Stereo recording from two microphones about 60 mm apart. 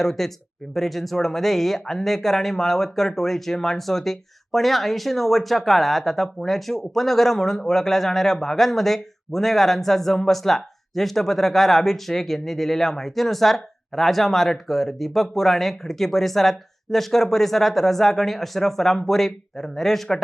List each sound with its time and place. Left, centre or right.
0.0 s a man's voice: centre